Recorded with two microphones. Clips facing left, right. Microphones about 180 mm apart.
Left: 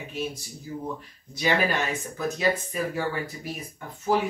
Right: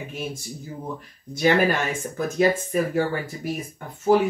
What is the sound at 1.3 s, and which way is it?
Speech, 50° right (ahead or behind).